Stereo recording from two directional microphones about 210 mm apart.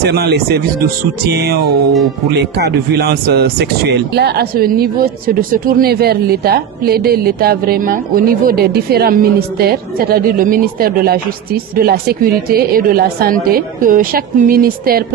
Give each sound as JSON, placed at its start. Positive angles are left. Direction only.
{"t": 0.0, "sound": "speech", "side_deg": -50}